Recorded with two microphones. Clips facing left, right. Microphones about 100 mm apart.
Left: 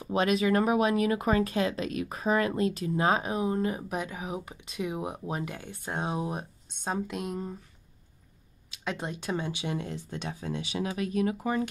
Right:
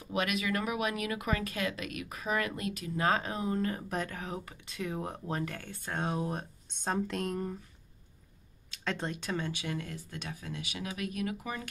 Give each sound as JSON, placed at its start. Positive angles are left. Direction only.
{"t": 0.0, "sound": "speech", "side_deg": 30}
{"t": 3.0, "sound": "speech", "side_deg": 20}
{"t": 6.7, "sound": "speech", "side_deg": 5}
{"t": 8.6, "sound": "a sound", "side_deg": 15}
{"t": 9.1, "sound": "speech", "side_deg": 20}